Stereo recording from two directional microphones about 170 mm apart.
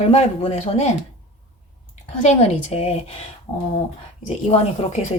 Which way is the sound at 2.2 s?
40° left (ahead or behind).